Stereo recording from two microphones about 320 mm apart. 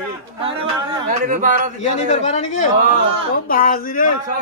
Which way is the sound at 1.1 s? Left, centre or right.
Right.